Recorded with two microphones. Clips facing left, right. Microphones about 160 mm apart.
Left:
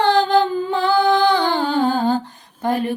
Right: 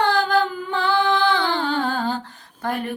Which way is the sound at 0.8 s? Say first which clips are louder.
Left 3 dB; 40° left (ahead or behind).